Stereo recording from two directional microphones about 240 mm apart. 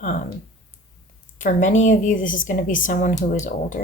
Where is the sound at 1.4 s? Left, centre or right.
Left.